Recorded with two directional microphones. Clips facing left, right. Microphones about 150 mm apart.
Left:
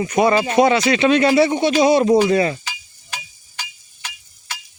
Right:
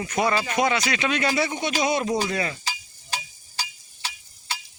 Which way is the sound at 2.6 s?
35° right (ahead or behind).